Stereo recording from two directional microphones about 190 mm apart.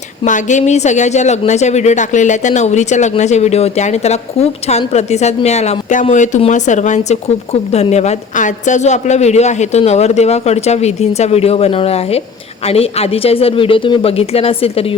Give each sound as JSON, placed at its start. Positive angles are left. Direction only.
{"t": 0.3, "sound": "speech", "side_deg": 40}